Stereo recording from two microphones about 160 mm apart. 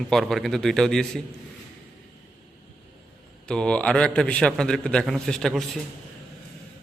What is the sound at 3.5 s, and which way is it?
A man's voice, 5° left (ahead or behind).